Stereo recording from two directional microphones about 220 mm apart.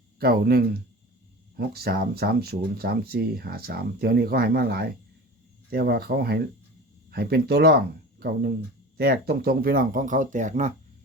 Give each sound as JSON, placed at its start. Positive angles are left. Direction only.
{"t": 0.2, "sound": "speech", "side_deg": -45}